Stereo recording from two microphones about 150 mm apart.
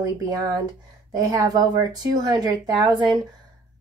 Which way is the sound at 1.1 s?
25° right (ahead or behind).